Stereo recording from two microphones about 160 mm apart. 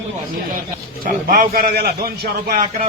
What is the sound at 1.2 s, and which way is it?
A man's voice, 60° right (ahead or behind).